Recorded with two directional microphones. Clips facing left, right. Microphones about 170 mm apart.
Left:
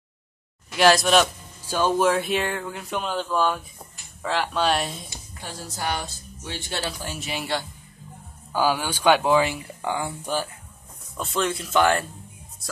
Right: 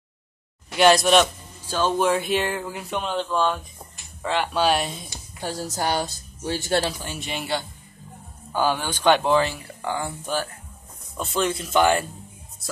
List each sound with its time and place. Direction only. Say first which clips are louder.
0.7 s speech: right 1 dB; centre (ahead or behind)
1.7 s speech: left 1 dB; 10° left (ahead or behind)
2.0 s speech: even; centre (ahead or behind)
5.4 s speech: right 5 dB; 40° right (ahead or behind)
7.0 s speech: even; centre (ahead or behind)
11.1 s speech: right 1 dB; centre (ahead or behind)